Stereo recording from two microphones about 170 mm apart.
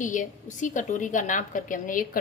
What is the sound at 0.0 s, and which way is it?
A woman's voice, 50° left (ahead or behind).